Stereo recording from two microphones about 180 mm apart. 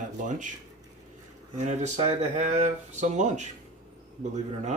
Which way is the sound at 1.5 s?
40° right (ahead or behind).